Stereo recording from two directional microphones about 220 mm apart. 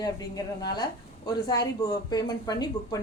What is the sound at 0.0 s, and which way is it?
Speech, 15° left (ahead or behind).